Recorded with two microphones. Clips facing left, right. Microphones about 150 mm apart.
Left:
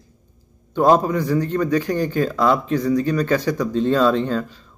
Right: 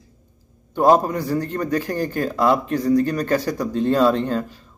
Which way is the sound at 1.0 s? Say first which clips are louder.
Left 3 dB; 40° right (ahead or behind).